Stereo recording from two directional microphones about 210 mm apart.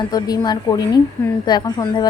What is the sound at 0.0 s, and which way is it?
A woman's voice, 20° left (ahead or behind).